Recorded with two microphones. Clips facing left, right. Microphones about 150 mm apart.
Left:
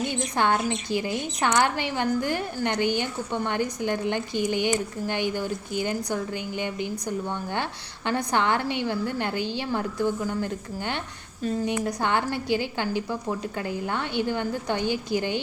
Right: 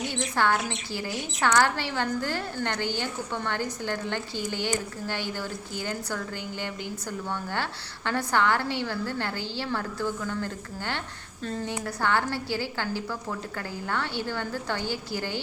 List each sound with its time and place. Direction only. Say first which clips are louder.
0.3 s a woman's voice: left 2 dB; 20° left (ahead or behind)